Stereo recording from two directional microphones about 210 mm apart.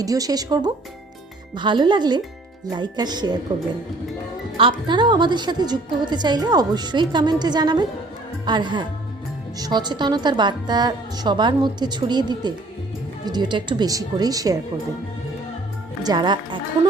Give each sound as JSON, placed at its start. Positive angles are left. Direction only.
{"t": 0.0, "sound": "a woman's voice", "side_deg": -15}
{"t": 4.5, "sound": "a woman's voice", "side_deg": -25}
{"t": 16.0, "sound": "a woman's voice", "side_deg": -20}